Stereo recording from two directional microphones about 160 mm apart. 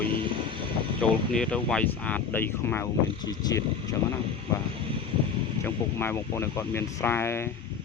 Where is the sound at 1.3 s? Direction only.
5° left (ahead or behind).